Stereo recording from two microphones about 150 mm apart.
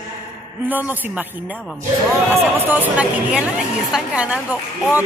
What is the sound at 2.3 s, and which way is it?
Speech, 15° right (ahead or behind).